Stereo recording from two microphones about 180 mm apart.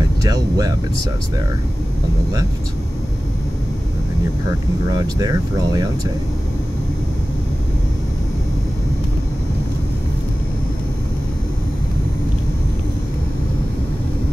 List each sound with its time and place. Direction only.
0.2 s speech: 20° right (ahead or behind)
4.8 s speech: 20° right (ahead or behind)